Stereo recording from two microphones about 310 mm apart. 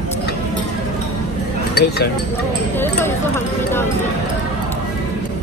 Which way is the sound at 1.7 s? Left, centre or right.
Left.